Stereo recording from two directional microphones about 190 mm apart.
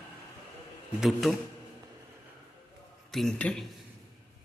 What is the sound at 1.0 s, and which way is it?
Speech, centre (ahead or behind).